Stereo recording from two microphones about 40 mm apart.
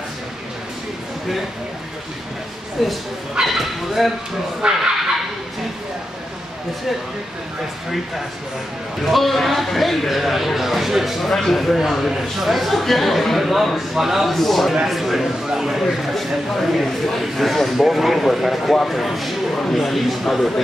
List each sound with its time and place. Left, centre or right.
2.8 s speech: centre
4.6 s speech: right
9.0 s speech: centre
11.2 s a man's voice: centre
14.3 s a man's voice: centre
16.5 s speech: centre
19.5 s speech: centre
19.8 s speech: centre